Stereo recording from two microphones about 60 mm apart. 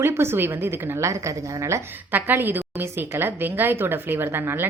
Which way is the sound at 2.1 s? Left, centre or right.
Right.